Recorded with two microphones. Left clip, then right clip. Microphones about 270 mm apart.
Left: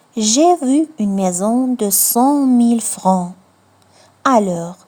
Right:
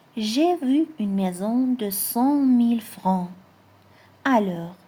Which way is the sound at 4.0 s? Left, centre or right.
Left.